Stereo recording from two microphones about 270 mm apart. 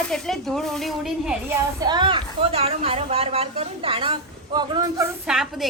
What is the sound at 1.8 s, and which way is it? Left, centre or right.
A woman's voice, centre.